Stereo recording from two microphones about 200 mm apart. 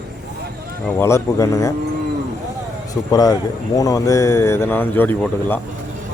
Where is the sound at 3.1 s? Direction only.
20° left (ahead or behind).